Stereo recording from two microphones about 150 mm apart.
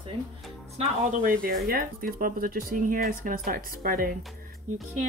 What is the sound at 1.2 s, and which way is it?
Speech, 70° right (ahead or behind).